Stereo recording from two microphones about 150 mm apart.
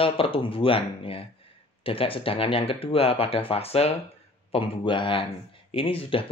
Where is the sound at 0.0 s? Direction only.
35° left (ahead or behind).